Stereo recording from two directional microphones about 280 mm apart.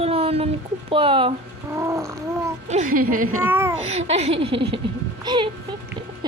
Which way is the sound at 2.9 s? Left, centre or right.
Right.